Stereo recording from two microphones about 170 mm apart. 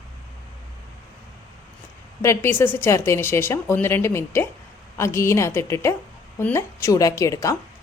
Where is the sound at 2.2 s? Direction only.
15° left (ahead or behind).